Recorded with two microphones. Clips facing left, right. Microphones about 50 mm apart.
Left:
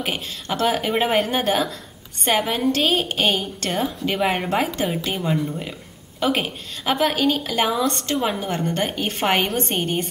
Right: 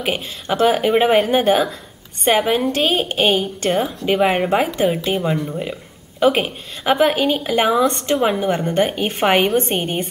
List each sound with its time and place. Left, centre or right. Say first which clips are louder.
0.0 s speech: right 4 dB; centre